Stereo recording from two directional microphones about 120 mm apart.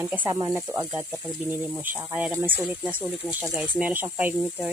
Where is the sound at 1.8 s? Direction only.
15° right (ahead or behind).